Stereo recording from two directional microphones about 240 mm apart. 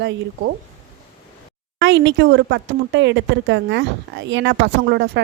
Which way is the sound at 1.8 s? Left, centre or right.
Right.